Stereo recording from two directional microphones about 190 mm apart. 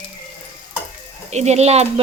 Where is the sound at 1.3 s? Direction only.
35° right (ahead or behind).